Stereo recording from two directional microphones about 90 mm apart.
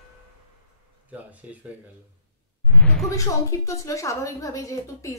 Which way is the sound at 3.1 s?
35° left (ahead or behind).